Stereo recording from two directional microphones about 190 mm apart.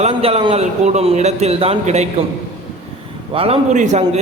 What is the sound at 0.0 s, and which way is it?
A man's voice, 30° right (ahead or behind).